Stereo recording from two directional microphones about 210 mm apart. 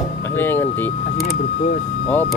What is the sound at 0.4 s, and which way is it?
Vehicle, 10° left (ahead or behind).